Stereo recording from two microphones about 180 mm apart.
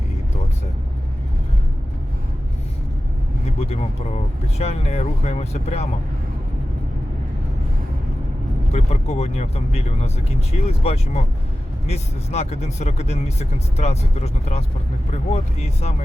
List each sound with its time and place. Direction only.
4.5 s speech: 35° left (ahead or behind)
8.7 s speech: 40° left (ahead or behind)